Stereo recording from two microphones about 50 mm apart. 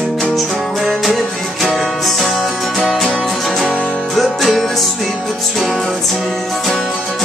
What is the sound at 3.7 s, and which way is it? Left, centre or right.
Music, left.